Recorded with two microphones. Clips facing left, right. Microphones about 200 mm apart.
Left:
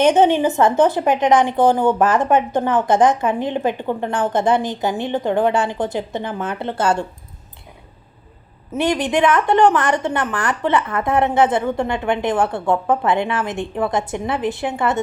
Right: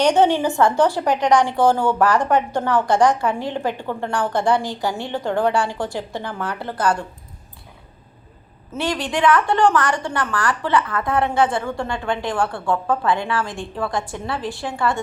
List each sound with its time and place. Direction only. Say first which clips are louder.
0.0 s a woman's voice: left 2 dB; 20° left (ahead or behind)
8.7 s a woman's voice: left 5 dB; 20° left (ahead or behind)